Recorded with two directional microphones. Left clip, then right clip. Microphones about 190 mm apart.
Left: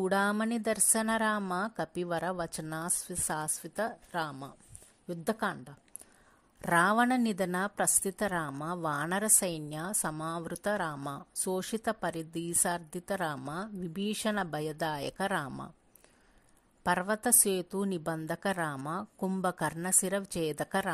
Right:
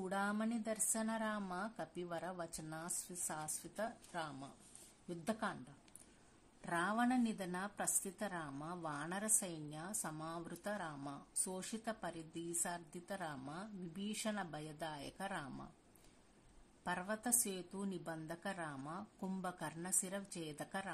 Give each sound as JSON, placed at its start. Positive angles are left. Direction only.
{"t": 0.0, "sound": "a woman's voice", "side_deg": 45}
{"t": 6.6, "sound": "a woman's voice", "side_deg": 45}
{"t": 16.8, "sound": "a woman's voice", "side_deg": 45}